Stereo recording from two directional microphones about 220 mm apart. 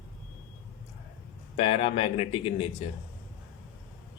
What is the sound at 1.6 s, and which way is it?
Speech, 25° left (ahead or behind).